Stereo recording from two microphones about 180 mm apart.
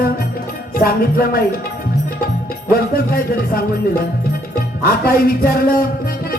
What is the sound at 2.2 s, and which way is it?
Music, 55° left (ahead or behind).